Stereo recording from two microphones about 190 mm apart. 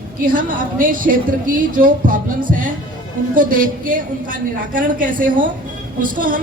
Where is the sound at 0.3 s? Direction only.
45° right (ahead or behind).